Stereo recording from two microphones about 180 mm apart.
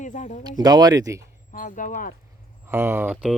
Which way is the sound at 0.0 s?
45° left (ahead or behind).